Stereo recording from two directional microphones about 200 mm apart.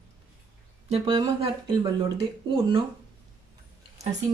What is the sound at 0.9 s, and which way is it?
Speech, 25° right (ahead or behind).